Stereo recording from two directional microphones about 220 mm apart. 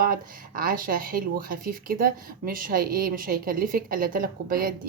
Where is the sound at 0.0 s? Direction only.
40° right (ahead or behind).